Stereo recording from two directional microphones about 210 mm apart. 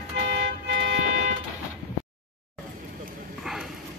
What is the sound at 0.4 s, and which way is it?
Toot, 55° right (ahead or behind).